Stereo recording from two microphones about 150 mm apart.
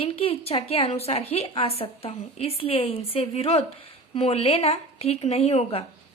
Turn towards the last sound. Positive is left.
turn(degrees=40)  # may be behind; listen again after turning